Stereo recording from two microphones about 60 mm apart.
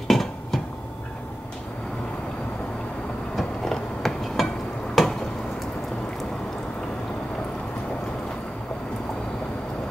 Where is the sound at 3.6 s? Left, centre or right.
Centre.